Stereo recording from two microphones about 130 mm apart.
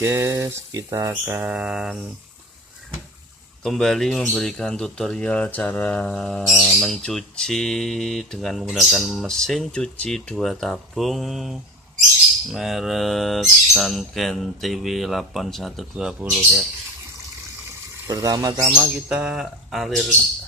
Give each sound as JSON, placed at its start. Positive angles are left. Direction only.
{"t": 0.0, "sound": "speech", "side_deg": -20}
{"t": 1.1, "sound": "mantra", "side_deg": -15}
{"t": 3.6, "sound": "speech", "side_deg": 0}
{"t": 17.7, "sound": "water", "side_deg": -25}
{"t": 18.6, "sound": "speech", "side_deg": -10}